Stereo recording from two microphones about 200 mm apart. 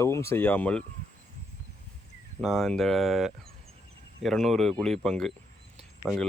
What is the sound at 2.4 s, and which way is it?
Speech, centre (ahead or behind).